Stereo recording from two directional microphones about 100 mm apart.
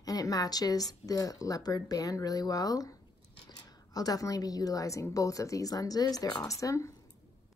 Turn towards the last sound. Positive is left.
turn(degrees=30)  # may be behind; listen again after turning